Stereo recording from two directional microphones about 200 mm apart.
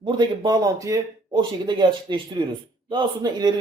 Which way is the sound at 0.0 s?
20° right (ahead or behind).